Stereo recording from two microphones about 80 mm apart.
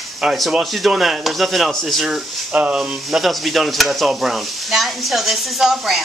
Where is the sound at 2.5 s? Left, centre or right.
Centre.